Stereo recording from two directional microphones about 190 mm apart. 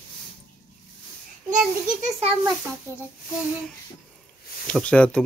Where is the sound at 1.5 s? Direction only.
40° right (ahead or behind).